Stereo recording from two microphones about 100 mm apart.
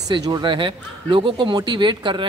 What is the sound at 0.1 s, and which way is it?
A man's voice, 45° right (ahead or behind).